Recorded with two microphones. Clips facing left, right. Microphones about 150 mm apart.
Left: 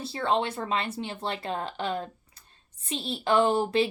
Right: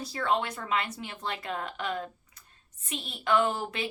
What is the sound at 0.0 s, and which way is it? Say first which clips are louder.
A woman's voice: left 2 dB; 25° left (ahead or behind).